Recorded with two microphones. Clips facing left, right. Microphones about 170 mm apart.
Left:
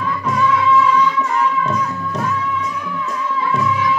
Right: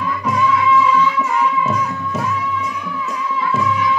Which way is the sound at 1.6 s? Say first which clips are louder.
Even; 5° right (ahead or behind).